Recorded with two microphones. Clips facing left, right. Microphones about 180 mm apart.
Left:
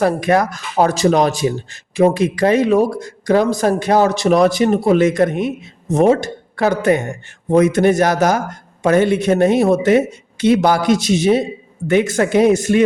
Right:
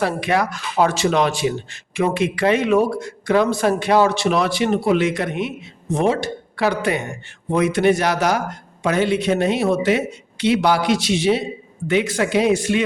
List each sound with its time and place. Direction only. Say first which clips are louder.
0.0 s a man's voice: left 5 dB; 45° left (ahead or behind)